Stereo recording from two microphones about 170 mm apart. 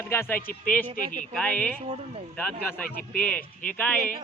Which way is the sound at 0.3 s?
55° left (ahead or behind).